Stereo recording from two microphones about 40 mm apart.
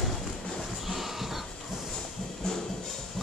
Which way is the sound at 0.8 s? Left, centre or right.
Centre.